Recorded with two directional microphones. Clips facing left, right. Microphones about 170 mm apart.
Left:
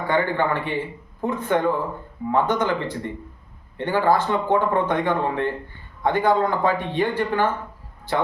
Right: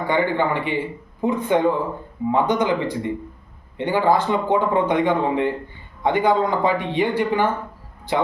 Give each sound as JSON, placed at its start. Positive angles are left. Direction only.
{"t": 0.1, "sound": "a man's voice", "side_deg": -15}